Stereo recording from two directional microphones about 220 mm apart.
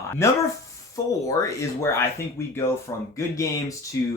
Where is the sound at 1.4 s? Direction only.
15° left (ahead or behind).